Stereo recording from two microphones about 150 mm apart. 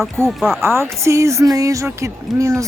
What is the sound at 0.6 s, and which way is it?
A woman's voice, 15° right (ahead or behind).